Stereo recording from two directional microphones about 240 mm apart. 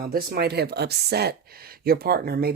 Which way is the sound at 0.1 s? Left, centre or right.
Right.